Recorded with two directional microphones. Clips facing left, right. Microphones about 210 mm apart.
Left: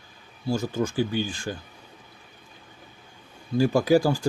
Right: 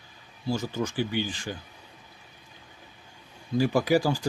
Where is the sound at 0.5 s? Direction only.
10° left (ahead or behind).